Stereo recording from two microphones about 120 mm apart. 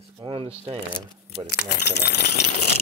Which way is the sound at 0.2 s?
50° right (ahead or behind).